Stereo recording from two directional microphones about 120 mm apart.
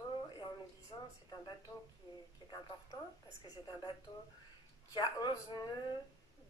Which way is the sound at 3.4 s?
35° left (ahead or behind).